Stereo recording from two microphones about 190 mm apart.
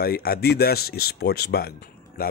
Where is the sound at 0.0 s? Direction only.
55° left (ahead or behind).